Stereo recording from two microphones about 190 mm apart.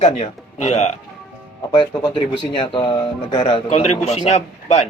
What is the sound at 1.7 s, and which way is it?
Speech, 25° left (ahead or behind).